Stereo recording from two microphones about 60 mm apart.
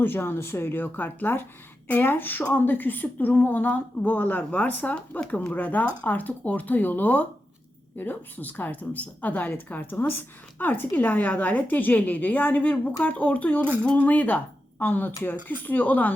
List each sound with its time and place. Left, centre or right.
0.0 s a woman's voice: left